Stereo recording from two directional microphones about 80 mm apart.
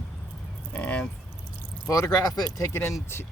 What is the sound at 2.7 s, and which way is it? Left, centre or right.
Speech, left.